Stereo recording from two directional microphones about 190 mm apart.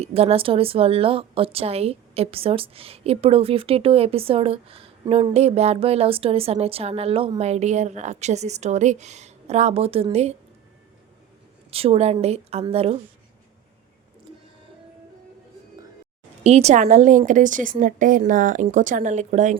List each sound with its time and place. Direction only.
0.0 s a woman's voice: 30° right (ahead or behind)
11.7 s a woman's voice: 30° right (ahead or behind)
16.4 s a woman's voice: 35° right (ahead or behind)